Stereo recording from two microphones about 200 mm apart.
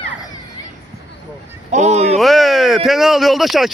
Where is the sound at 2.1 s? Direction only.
Centre (ahead or behind).